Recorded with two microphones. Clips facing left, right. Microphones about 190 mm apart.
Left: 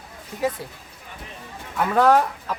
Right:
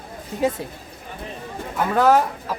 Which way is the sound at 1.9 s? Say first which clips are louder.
Even; centre (ahead or behind).